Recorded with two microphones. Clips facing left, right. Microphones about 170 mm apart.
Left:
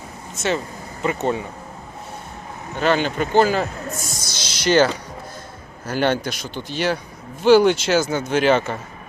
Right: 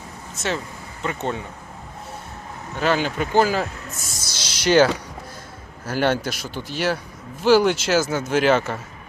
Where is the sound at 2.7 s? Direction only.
5° right (ahead or behind).